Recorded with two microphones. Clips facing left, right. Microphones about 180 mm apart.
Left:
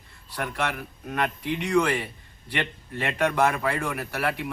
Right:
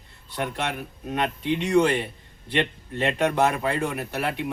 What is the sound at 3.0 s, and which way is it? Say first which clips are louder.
A man's voice: right 2 dB; 20° right (ahead or behind).